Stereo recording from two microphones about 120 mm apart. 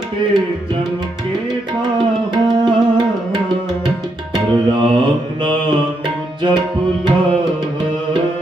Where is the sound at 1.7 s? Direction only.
40° right (ahead or behind).